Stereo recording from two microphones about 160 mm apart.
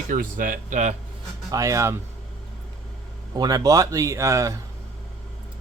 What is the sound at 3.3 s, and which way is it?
Speech, 25° right (ahead or behind).